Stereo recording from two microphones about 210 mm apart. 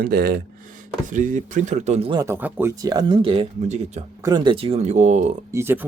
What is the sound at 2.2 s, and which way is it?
Speech, 10° right (ahead or behind).